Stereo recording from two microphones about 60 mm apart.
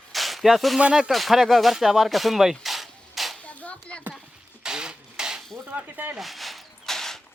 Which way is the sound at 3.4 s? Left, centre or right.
Left.